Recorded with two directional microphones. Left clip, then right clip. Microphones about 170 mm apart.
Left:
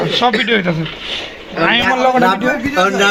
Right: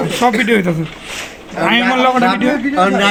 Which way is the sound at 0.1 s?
15° right (ahead or behind).